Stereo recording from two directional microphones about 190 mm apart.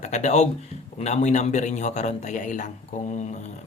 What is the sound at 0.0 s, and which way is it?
Speech, 35° left (ahead or behind).